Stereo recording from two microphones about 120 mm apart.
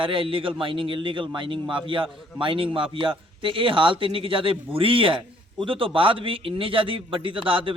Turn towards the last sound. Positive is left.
turn(degrees=-45)  # may be behind; listen again after turning